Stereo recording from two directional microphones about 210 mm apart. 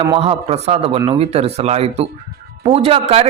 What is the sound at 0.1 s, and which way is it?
Speech, 30° right (ahead or behind).